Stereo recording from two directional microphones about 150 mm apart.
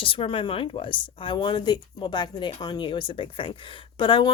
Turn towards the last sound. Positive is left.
turn(degrees=30)  # may be behind; listen again after turning